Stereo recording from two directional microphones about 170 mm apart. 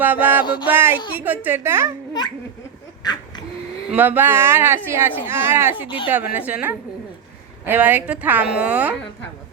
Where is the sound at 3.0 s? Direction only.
25° left (ahead or behind).